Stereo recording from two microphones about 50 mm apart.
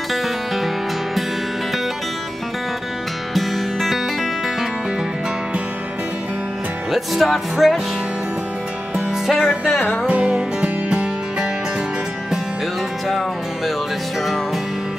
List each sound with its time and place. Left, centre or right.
3.3 s music: centre
6.9 s music: centre
9.3 s music: centre
10.0 s music: right